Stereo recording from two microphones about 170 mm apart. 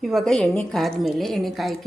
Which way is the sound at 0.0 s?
Centre (ahead or behind).